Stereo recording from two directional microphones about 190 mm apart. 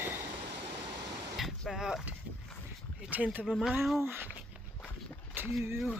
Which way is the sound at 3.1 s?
10° right (ahead or behind).